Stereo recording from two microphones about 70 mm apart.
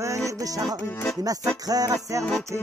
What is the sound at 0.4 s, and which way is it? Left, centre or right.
Music, right.